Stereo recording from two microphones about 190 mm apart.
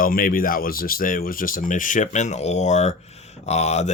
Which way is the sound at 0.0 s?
50° left (ahead or behind).